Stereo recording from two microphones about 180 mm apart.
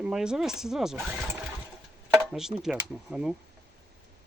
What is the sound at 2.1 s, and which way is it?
Chopping, centre (ahead or behind).